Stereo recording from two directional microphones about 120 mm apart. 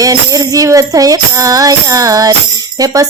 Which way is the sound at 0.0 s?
30° right (ahead or behind).